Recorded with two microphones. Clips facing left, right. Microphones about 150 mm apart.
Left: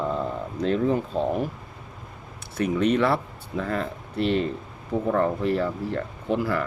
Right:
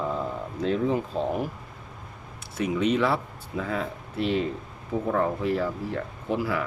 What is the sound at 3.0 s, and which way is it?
Speech, 5° right (ahead or behind).